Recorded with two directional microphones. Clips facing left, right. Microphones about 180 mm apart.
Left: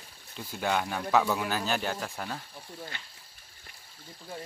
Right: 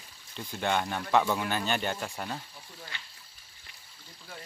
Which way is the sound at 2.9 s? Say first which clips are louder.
Left 1 dB; 50° left (ahead or behind).